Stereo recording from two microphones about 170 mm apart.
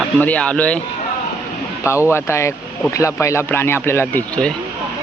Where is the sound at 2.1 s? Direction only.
15° left (ahead or behind).